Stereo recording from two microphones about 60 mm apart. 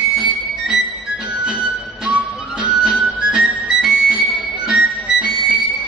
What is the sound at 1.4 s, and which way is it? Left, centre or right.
Music, centre.